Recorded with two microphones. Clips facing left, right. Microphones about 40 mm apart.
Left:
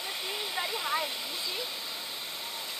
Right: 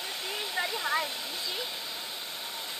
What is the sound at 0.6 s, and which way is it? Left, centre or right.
Waterfall, centre.